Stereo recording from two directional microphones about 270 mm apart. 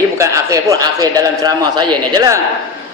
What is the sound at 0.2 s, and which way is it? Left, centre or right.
A man's voice, centre.